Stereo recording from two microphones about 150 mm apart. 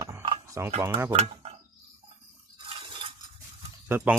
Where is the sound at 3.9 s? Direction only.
10° right (ahead or behind).